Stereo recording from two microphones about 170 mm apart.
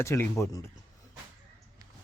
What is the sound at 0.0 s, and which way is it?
Speech, 15° left (ahead or behind).